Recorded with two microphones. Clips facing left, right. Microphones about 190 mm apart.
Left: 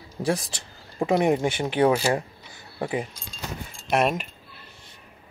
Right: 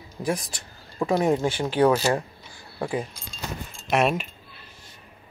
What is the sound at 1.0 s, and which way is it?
A woman's voice, 15° left (ahead or behind).